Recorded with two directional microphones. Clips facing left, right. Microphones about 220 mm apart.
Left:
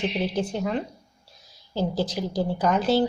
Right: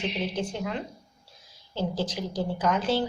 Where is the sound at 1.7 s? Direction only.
40° left (ahead or behind).